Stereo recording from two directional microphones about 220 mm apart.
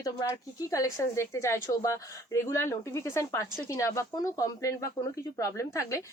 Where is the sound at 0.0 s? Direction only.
15° left (ahead or behind).